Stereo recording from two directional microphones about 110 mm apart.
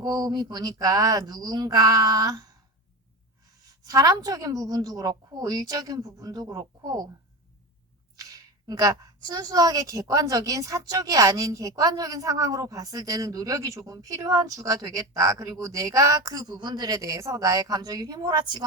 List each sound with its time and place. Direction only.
0.0 s a woman's voice: 40° right (ahead or behind)
8.1 s a woman's voice: 35° right (ahead or behind)